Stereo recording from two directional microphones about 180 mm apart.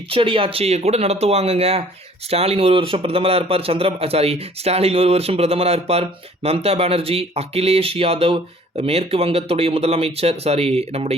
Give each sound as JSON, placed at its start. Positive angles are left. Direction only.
{"t": 0.1, "sound": "speech", "side_deg": -30}